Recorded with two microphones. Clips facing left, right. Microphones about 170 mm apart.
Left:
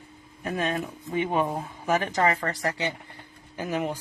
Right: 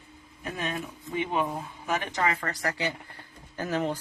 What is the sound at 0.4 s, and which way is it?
Speech, 50° left (ahead or behind).